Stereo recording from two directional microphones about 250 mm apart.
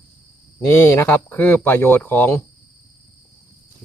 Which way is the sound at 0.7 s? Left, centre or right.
Centre.